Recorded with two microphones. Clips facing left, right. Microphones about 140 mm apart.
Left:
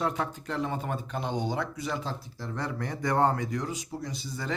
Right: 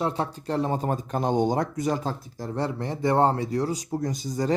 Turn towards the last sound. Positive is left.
turn(degrees=-30)  # may be behind; listen again after turning